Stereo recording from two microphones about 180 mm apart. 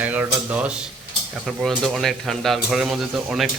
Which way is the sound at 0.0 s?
10° right (ahead or behind).